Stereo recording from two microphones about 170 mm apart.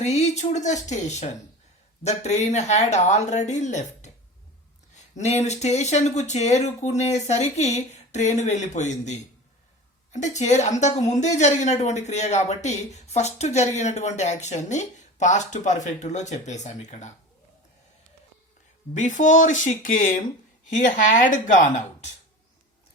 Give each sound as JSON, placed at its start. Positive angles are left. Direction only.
{"t": 0.0, "sound": "a woman's voice", "side_deg": 40}
{"t": 18.9, "sound": "a woman's voice", "side_deg": 45}